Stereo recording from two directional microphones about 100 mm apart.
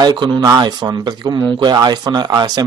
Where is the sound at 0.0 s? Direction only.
40° right (ahead or behind).